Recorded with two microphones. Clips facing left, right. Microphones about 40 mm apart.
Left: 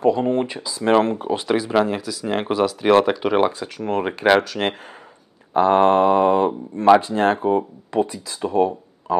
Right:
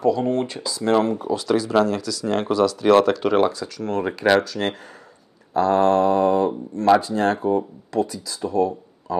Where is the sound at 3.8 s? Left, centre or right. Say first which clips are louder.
Left 2 dB; left.